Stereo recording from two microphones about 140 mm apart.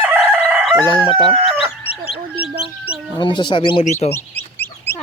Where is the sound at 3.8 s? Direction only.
55° left (ahead or behind).